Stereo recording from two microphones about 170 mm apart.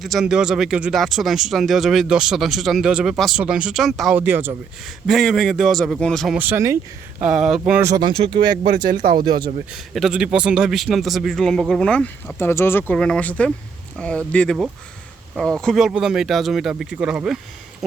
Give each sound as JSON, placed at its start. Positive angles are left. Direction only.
{"t": 0.0, "sound": "speech", "side_deg": 0}
{"t": 6.3, "sound": "speech", "side_deg": -10}
{"t": 7.2, "sound": "speech", "side_deg": -5}
{"t": 7.6, "sound": "speech", "side_deg": -15}
{"t": 8.9, "sound": "speech", "side_deg": -55}
{"t": 9.2, "sound": "speech", "side_deg": -25}
{"t": 9.7, "sound": "speech", "side_deg": 0}
{"t": 15.6, "sound": "speech", "side_deg": 0}